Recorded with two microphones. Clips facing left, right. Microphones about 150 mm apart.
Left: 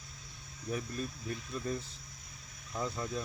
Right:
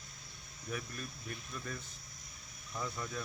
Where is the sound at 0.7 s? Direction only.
30° left (ahead or behind).